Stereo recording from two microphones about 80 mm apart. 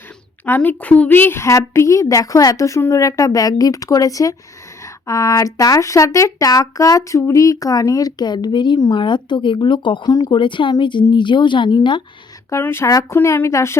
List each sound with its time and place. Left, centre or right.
0.4 s a woman's voice: left
10.1 s speech: left
10.3 s speech: left
12.5 s a woman's voice: left